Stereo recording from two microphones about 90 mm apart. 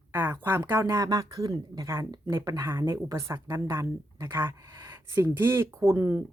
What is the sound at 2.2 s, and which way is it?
Speech, 35° right (ahead or behind).